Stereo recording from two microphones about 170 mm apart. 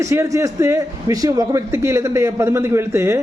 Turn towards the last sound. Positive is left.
turn(degrees=-15)  # may be behind; listen again after turning